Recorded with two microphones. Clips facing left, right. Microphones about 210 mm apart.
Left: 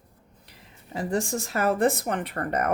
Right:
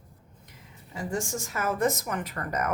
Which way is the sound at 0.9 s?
35° left (ahead or behind).